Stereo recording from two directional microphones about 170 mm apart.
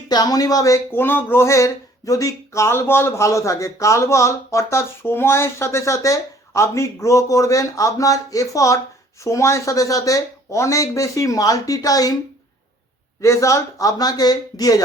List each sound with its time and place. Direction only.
0.1 s speech: 20° left (ahead or behind)
13.2 s speech: 15° left (ahead or behind)